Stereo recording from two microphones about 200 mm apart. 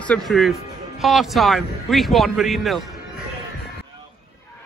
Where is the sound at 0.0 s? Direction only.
5° left (ahead or behind).